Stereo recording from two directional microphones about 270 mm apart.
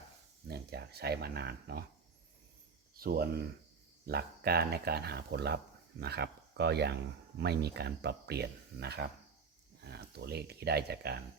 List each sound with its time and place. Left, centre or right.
0.4 s speech: right
2.9 s speech: right